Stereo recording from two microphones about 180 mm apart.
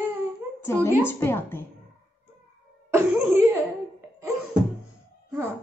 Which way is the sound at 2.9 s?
15° right (ahead or behind).